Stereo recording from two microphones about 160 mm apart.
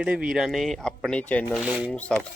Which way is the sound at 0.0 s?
5° right (ahead or behind).